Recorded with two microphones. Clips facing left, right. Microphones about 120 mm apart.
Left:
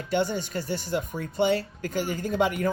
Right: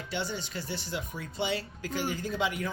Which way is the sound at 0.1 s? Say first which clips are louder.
Left 9 dB; 50° left (ahead or behind).